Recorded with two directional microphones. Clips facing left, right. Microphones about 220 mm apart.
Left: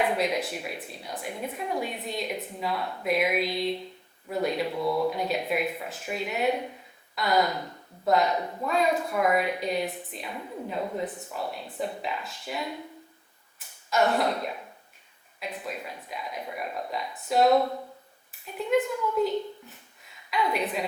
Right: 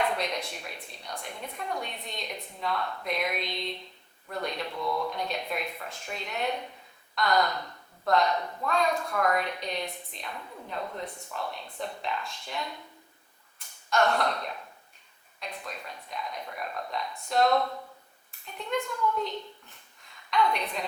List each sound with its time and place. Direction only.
0.0 s a woman's voice: 5° left (ahead or behind)
4.8 s speech: 30° left (ahead or behind)
5.0 s a woman's voice: 5° left (ahead or behind)
20.3 s a woman's voice: 5° left (ahead or behind)